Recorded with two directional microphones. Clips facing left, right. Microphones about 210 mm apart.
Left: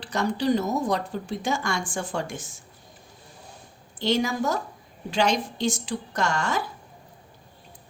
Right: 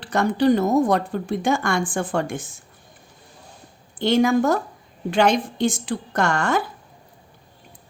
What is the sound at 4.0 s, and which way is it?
Speech, 55° right (ahead or behind).